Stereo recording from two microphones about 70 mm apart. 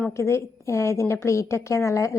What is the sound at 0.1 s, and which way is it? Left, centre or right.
A woman's voice, left.